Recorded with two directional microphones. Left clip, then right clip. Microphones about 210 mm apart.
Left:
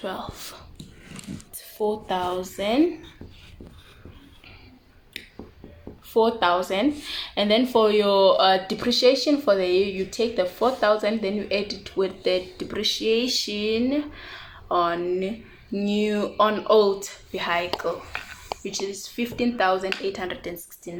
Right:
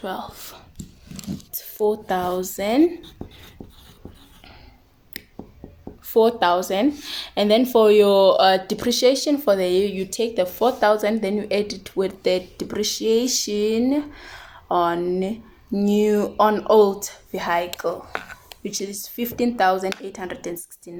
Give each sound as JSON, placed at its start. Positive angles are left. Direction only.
{"t": 0.0, "sound": "speech", "side_deg": -50}
{"t": 6.1, "sound": "speech", "side_deg": -50}